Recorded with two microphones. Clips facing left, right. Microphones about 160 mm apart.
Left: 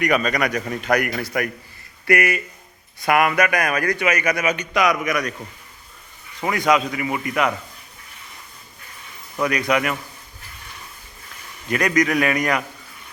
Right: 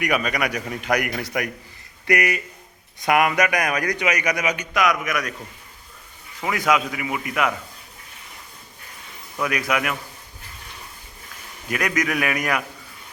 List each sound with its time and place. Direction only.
0.0 s a man's voice: 10° right (ahead or behind)
6.4 s a man's voice: 5° right (ahead or behind)
9.4 s a man's voice: 5° right (ahead or behind)
11.7 s a man's voice: 5° right (ahead or behind)